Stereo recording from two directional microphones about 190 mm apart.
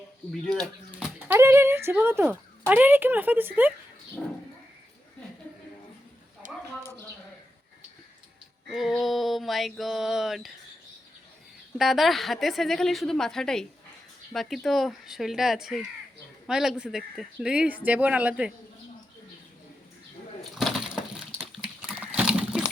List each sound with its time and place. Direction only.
0.4 s speech: 5° left (ahead or behind)
0.9 s speech: 10° right (ahead or behind)
6.4 s a sound: 40° right (ahead or behind)
8.7 s speech: centre (ahead or behind)
11.8 s speech: centre (ahead or behind)
20.4 s a sound: centre (ahead or behind)